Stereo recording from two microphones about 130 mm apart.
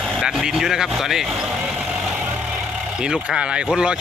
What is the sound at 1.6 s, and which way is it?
Vehicle, 5° right (ahead or behind).